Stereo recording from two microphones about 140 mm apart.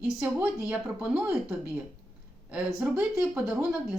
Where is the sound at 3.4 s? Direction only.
5° right (ahead or behind).